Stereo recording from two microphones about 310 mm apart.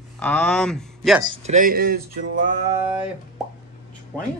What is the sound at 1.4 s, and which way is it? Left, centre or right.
Speech, right.